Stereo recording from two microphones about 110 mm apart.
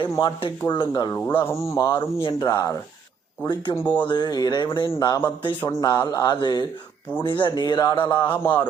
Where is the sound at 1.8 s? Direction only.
50° left (ahead or behind).